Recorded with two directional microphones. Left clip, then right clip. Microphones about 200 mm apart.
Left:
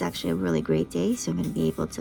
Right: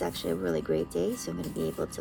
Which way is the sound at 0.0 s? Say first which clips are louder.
Left 2 dB; 20° left (ahead or behind).